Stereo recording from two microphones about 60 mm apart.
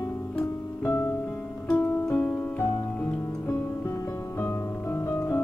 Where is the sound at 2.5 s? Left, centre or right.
Left.